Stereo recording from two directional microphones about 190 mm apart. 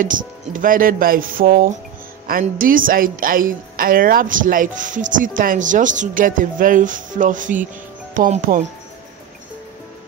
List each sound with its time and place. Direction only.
0.0 s speech: 45° right (ahead or behind)